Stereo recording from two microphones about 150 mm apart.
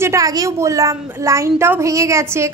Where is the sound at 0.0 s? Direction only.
20° right (ahead or behind).